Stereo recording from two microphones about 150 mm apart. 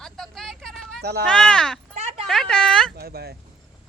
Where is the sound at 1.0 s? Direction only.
90° right.